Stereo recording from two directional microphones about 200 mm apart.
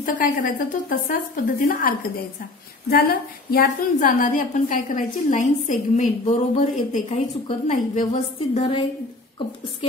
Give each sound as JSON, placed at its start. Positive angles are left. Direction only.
{"t": 0.0, "sound": "a woman's voice", "side_deg": 45}
{"t": 8.5, "sound": "a woman's voice", "side_deg": 25}